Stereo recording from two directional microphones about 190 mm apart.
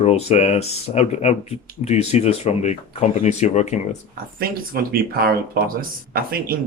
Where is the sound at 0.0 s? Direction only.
35° left (ahead or behind).